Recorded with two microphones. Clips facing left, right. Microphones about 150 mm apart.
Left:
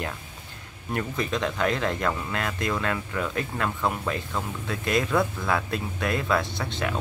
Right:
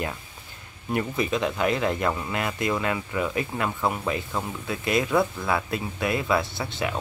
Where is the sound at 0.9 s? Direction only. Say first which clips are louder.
Right 3 dB; 5° right (ahead or behind).